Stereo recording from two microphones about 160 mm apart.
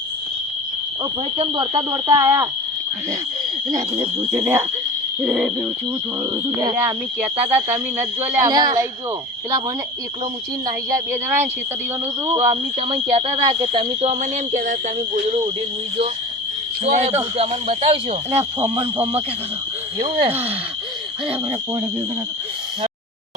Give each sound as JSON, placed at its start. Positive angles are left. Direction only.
{"t": 1.7, "sound": "speech", "side_deg": -20}
{"t": 3.7, "sound": "speech", "side_deg": -25}
{"t": 6.3, "sound": "speech", "side_deg": -20}
{"t": 8.4, "sound": "speech", "side_deg": -25}
{"t": 10.7, "sound": "speech", "side_deg": -20}
{"t": 12.8, "sound": "speech", "side_deg": -35}
{"t": 13.8, "sound": "speech", "side_deg": -50}
{"t": 16.8, "sound": "speech", "side_deg": -45}
{"t": 18.6, "sound": "speech", "side_deg": -15}
{"t": 20.1, "sound": "speech", "side_deg": -35}
{"t": 21.2, "sound": "speech", "side_deg": -20}